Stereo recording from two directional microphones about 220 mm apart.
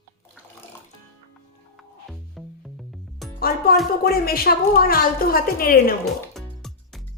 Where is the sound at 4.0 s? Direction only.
45° left (ahead or behind).